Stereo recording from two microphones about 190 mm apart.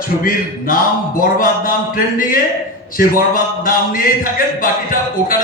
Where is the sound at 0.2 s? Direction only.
50° left (ahead or behind).